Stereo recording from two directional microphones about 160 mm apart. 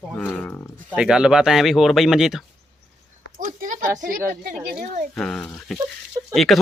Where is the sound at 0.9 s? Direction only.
5° right (ahead or behind).